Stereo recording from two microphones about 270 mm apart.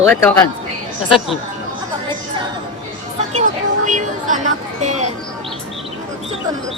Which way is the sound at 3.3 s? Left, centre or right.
Right.